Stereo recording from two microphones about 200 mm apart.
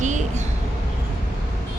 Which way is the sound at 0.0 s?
35° right (ahead or behind).